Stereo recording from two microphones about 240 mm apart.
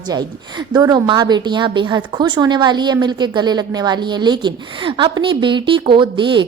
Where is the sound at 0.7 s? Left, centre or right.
Centre.